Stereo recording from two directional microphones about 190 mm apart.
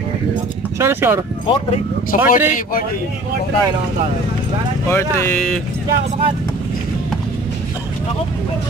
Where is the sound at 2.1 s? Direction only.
40° left (ahead or behind).